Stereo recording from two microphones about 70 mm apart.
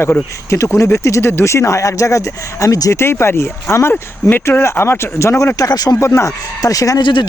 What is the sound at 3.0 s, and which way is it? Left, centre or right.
Speech, left.